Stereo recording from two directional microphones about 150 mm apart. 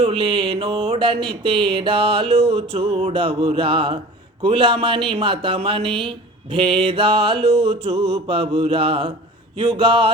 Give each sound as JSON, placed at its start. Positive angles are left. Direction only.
{"t": 0.0, "sound": "a man's voice", "side_deg": -35}